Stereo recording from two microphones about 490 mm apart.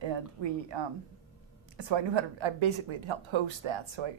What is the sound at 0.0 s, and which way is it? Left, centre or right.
A woman's voice, right.